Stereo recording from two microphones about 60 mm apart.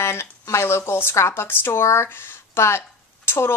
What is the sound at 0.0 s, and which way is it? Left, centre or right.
A woman's voice, left.